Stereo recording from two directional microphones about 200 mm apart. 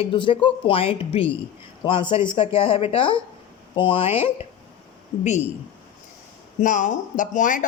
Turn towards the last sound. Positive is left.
turn(degrees=40)  # may be behind; listen again after turning